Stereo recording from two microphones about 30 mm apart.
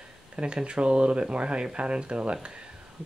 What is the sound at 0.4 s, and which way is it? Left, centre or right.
Speech, right.